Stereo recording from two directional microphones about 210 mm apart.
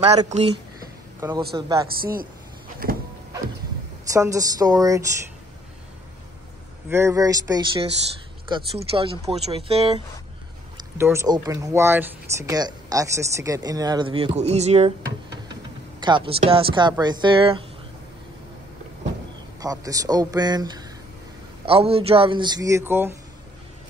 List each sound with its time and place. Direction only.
0.0 s speech: 30° right (ahead or behind)
1.5 s speech: 15° right (ahead or behind)
1.9 s speech: 45° right (ahead or behind)
4.1 s speech: 15° right (ahead or behind)
6.9 s speech: 15° right (ahead or behind)
11.0 s speech: 10° right (ahead or behind); by 14.9 s 30° right (ahead or behind)
16.0 s speech: 25° right (ahead or behind)
19.6 s speech: 15° right (ahead or behind)